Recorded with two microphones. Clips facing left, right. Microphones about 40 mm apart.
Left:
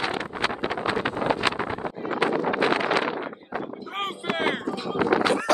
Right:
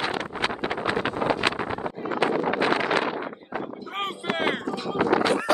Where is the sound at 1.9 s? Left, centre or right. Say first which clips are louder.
Even; left.